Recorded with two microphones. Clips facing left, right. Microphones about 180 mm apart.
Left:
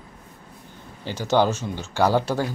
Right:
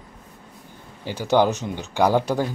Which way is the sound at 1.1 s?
15° right (ahead or behind).